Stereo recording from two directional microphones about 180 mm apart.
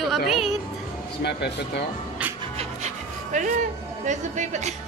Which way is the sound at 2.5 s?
40° right (ahead or behind).